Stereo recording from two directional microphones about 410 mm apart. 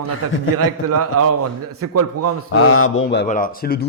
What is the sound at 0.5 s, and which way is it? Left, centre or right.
A man's voice, right.